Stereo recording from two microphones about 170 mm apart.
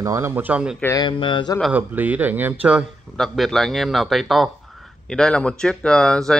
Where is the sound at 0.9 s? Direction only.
25° left (ahead or behind).